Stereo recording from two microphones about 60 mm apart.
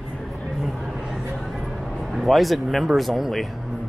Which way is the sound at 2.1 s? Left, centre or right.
Centre.